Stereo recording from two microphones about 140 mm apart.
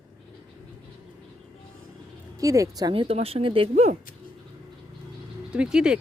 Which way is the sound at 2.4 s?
25° right (ahead or behind).